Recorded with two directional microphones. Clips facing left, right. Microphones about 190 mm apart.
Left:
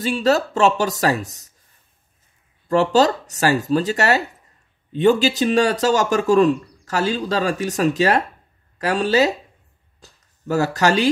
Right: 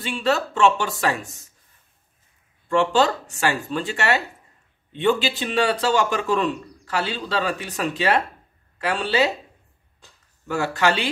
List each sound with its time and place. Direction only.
0.0 s speech: 40° left (ahead or behind)
2.7 s speech: 40° left (ahead or behind)
9.9 s a sound: 40° left (ahead or behind)